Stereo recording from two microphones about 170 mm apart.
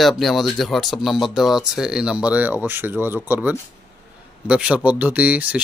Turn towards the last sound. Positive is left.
turn(degrees=-10)  # may be behind; listen again after turning